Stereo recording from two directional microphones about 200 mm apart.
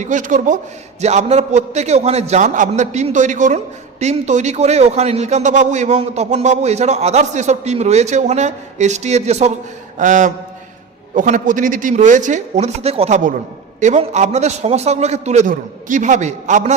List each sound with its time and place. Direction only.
0.0 s a man's voice: 40° right (ahead or behind)